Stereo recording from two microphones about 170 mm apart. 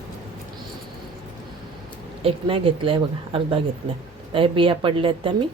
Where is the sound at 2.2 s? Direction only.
35° right (ahead or behind).